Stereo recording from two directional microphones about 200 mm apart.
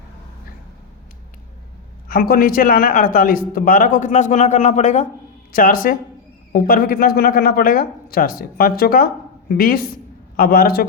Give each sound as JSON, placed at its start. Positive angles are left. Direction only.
{"t": 2.0, "sound": "a man's voice", "side_deg": 45}